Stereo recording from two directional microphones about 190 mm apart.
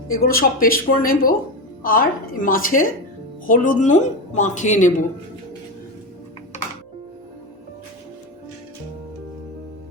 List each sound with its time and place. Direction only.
0.1 s a woman's voice: 50° left (ahead or behind)